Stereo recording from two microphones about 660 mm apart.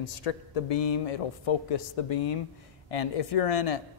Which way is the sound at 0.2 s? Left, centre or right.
Left.